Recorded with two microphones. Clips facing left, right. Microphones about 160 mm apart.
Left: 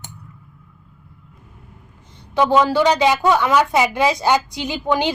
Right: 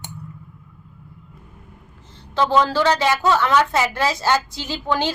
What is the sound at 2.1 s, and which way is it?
A woman's voice, 15° left (ahead or behind).